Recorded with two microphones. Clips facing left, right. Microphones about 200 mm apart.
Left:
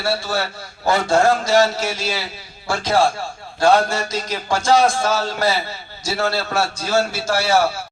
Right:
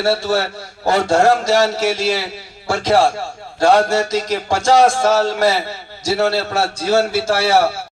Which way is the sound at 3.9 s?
80° right.